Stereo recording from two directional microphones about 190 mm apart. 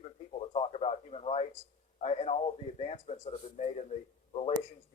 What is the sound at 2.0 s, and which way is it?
A man's voice, 35° left (ahead or behind).